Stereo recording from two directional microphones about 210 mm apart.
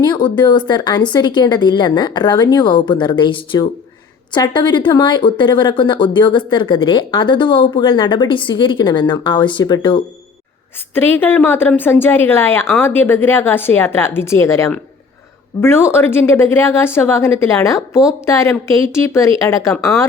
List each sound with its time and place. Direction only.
0.0 s a woman's voice: 20° left (ahead or behind)